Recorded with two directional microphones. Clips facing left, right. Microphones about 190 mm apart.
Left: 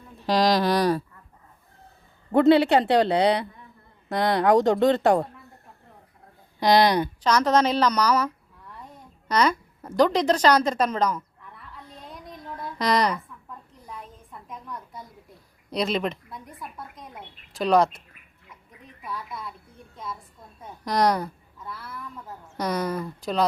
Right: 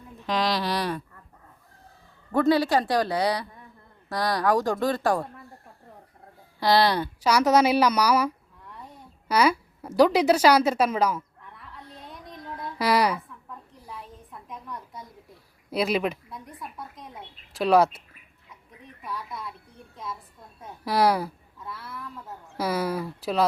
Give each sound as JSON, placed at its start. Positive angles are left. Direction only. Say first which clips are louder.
{"t": 0.2, "sound": "speech", "louder": "left 5 dB", "side_deg": 35}
{"t": 2.3, "sound": "a woman's voice", "louder": "left 4 dB", "side_deg": 25}
{"t": 6.6, "sound": "speech", "louder": "left 2 dB", "side_deg": 20}
{"t": 7.2, "sound": "a woman's voice", "louder": "right 3 dB", "side_deg": -10}
{"t": 9.3, "sound": "a sound", "louder": "right 1 dB", "side_deg": -10}
{"t": 15.7, "sound": "speech", "louder": "right 1 dB", "side_deg": -5}
{"t": 19.0, "sound": "a woman's voice", "louder": "even", "side_deg": 0}